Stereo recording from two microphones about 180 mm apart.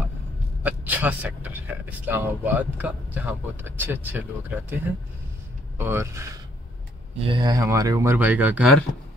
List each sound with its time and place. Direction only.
0.7 s speech: 10° right (ahead or behind)
5.8 s speech: 15° right (ahead or behind)
7.2 s speech: 30° right (ahead or behind); by 8.7 s 10° right (ahead or behind)